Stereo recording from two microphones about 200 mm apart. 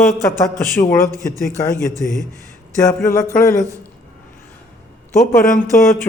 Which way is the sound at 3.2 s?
40° left (ahead or behind).